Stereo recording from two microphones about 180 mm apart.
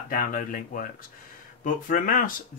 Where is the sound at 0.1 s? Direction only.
50° left (ahead or behind).